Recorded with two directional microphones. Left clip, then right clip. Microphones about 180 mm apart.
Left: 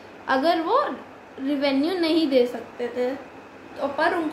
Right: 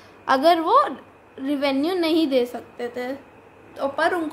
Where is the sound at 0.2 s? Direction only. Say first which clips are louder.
Right 4 dB; 35° right (ahead or behind).